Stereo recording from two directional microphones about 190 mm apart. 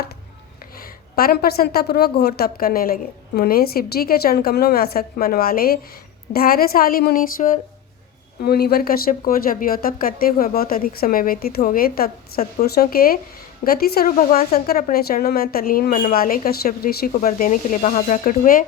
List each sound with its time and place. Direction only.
1.1 s a woman's voice: 50° left (ahead or behind)